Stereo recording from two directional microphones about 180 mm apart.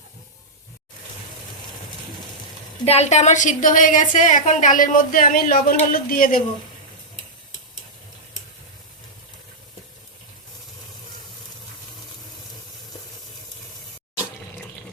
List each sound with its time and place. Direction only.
2.8 s a woman's voice: 35° left (ahead or behind); by 6.4 s 50° left (ahead or behind)